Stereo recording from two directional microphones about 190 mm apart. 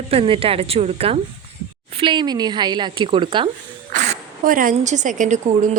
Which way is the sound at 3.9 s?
40° right (ahead or behind).